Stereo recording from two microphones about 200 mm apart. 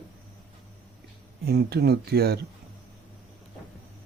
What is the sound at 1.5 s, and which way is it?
Speech, 55° right (ahead or behind).